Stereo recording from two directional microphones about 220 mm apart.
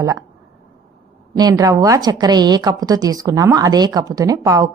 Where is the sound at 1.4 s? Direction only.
15° right (ahead or behind).